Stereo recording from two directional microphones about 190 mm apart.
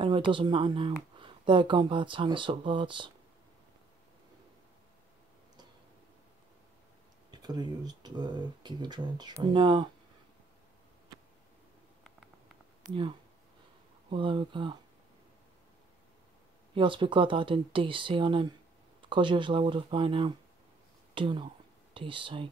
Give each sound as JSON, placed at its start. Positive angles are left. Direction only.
{"t": 0.0, "sound": "speech", "side_deg": -25}
{"t": 7.2, "sound": "speech", "side_deg": -20}
{"t": 14.1, "sound": "speech", "side_deg": -25}
{"t": 16.7, "sound": "speech", "side_deg": -25}